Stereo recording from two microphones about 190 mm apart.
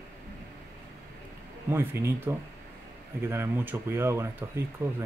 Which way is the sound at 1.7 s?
10° right (ahead or behind).